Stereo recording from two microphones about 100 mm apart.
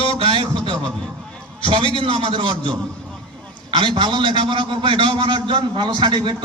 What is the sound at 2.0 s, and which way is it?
A man's voice, 65° right (ahead or behind).